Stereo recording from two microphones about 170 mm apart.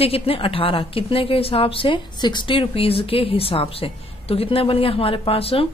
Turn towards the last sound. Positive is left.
turn(degrees=35)  # may be behind; listen again after turning